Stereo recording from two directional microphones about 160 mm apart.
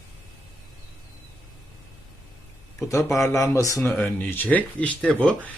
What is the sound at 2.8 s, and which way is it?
Speech, 20° left (ahead or behind).